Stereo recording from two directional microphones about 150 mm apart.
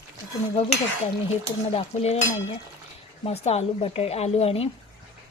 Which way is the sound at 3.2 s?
45° left (ahead or behind).